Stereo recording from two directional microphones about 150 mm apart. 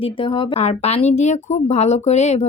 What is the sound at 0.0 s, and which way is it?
Speech, 35° left (ahead or behind).